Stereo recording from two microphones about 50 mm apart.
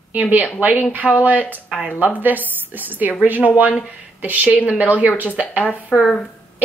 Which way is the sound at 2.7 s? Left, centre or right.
Right.